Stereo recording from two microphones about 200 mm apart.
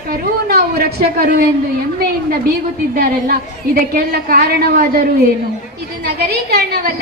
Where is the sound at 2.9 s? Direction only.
50° right (ahead or behind).